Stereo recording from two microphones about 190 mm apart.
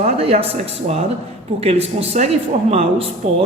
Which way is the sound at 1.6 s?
30° right (ahead or behind).